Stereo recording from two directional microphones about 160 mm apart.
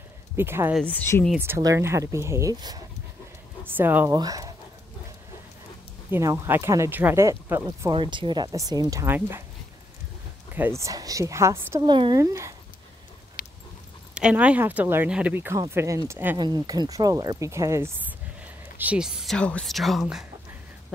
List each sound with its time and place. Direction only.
0.4 s speech: 15° right (ahead or behind)
0.7 s speech: 10° left (ahead or behind)
1.4 s speech: 20° right (ahead or behind)
6.0 s speech: 15° right (ahead or behind)
7.9 s speech: 30° right (ahead or behind); by 9.4 s 15° right (ahead or behind)
10.5 s speech: 15° right (ahead or behind)
13.4 s dog: 60° left (ahead or behind)
14.1 s speech: 5° right (ahead or behind)
16.3 s speech: 25° right (ahead or behind); by 20.2 s centre (ahead or behind)